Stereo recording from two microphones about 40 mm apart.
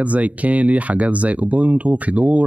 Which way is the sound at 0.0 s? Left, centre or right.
Right.